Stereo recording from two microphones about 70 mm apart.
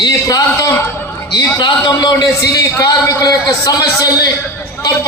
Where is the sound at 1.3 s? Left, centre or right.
Left.